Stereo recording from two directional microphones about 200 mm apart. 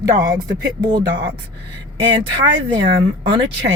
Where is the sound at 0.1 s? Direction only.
20° right (ahead or behind).